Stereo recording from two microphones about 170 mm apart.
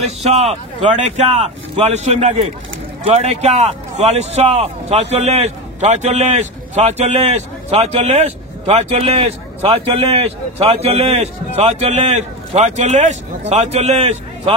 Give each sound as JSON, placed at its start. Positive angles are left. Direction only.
{"t": 0.0, "sound": "a man's voice", "side_deg": -40}